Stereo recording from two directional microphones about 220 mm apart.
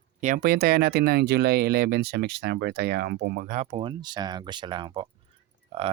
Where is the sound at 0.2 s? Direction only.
40° right (ahead or behind).